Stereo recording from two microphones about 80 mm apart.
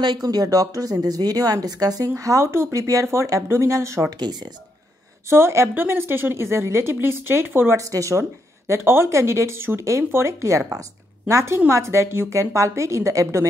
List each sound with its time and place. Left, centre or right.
0.0 s speech: right
4.2 s speech: right
5.3 s a woman's voice: right
7.7 s speech: right